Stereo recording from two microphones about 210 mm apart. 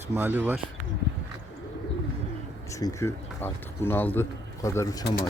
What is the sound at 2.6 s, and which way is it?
Speech, 15° left (ahead or behind).